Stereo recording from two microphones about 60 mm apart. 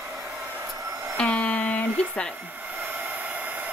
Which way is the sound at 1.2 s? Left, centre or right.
Left.